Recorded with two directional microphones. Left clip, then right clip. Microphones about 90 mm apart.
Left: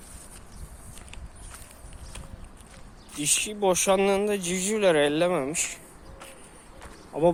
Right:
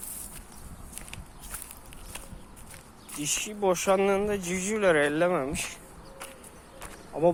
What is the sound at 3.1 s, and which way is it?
Speech, 75° left (ahead or behind).